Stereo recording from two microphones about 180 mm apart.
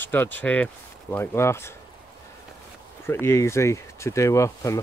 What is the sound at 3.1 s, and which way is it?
Speech, 15° left (ahead or behind).